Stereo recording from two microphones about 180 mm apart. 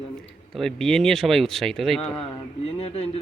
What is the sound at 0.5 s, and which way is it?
Speech, centre (ahead or behind).